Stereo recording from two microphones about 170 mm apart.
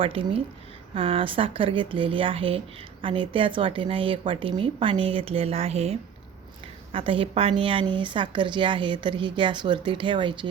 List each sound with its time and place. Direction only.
0.0 s a woman's voice: 30° right (ahead or behind)